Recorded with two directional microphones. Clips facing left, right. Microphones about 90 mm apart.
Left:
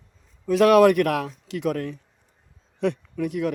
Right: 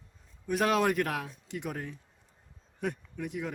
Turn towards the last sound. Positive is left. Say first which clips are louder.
# left 11 dB
turn(degrees=90)